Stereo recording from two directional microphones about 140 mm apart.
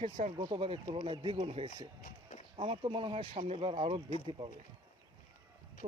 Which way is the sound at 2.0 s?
70° left (ahead or behind).